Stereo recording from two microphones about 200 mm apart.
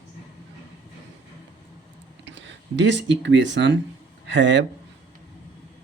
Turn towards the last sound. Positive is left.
turn(degrees=-65)  # may be behind; listen again after turning